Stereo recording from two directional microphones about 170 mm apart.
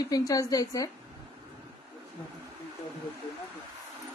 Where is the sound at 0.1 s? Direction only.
20° left (ahead or behind).